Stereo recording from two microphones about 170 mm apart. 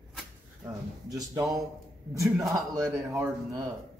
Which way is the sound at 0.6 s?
20° right (ahead or behind).